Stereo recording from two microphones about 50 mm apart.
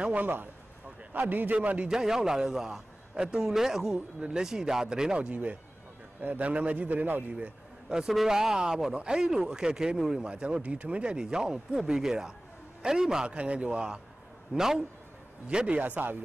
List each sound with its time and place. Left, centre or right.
0.0 s a man's voice: right
1.1 s a man's voice: right
1.5 s a man's voice: right
1.9 s speech: centre
5.3 s a man's voice: right
7.2 s a man's voice: right
8.1 s speech: centre
15.4 s a man's voice: right
15.8 s a man's voice: right